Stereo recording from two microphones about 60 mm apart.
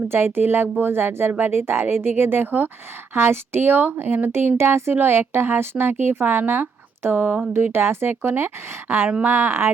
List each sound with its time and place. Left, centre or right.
0.1 s speech: right
7.5 s speech: right